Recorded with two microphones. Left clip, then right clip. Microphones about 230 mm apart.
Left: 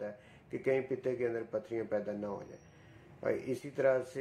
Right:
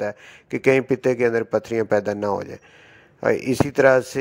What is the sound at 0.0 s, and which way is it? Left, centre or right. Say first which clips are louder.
A man's voice: right 16 dB; right.